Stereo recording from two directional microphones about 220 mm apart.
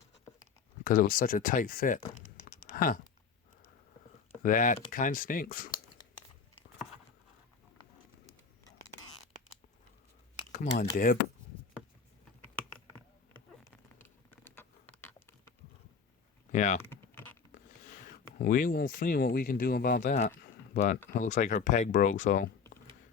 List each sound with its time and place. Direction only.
0.9 s speech: 40° left (ahead or behind)
4.4 s speech: 40° left (ahead or behind)
10.5 s speech: 35° left (ahead or behind)
14.0 s a sound: 10° left (ahead or behind)
16.5 s typing: 35° left (ahead or behind)
16.9 s typing: 10° left (ahead or behind)
17.5 s zipper: 35° left (ahead or behind)
18.3 s speech: 40° left (ahead or behind)